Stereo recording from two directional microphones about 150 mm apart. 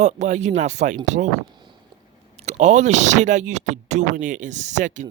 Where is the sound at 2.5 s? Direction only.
50° right (ahead or behind).